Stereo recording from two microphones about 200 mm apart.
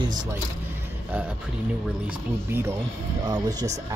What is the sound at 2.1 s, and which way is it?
Speech, 10° right (ahead or behind).